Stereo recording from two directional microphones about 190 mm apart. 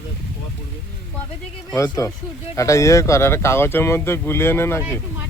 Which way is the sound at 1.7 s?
15° left (ahead or behind).